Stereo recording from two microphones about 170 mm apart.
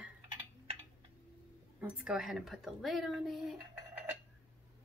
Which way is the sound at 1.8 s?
5° right (ahead or behind).